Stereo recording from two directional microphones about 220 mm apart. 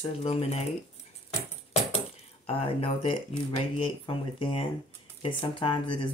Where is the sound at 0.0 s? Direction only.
25° left (ahead or behind).